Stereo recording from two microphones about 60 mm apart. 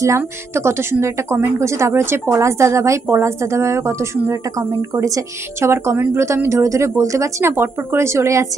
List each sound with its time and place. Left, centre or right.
0.5 s a woman's voice: right
5.5 s a woman's voice: right
7.5 s a woman's voice: right